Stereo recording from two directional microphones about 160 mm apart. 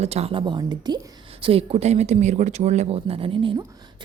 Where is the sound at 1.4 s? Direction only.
40° right (ahead or behind).